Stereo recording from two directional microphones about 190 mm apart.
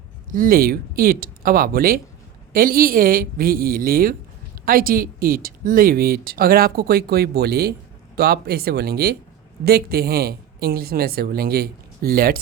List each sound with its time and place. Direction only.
0.3 s speech: 45° right (ahead or behind)